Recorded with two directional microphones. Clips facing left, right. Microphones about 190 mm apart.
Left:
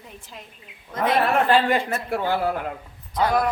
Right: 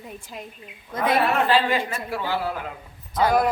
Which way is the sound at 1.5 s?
50° left (ahead or behind).